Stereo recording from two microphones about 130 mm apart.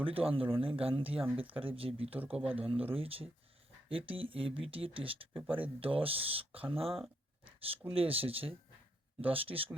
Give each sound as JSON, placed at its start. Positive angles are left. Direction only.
{"t": 0.0, "sound": "speech", "side_deg": -45}
{"t": 2.1, "sound": "speech", "side_deg": -10}
{"t": 2.5, "sound": "speech", "side_deg": -45}
{"t": 7.4, "sound": "a sound", "side_deg": -45}
{"t": 7.9, "sound": "speech", "side_deg": -45}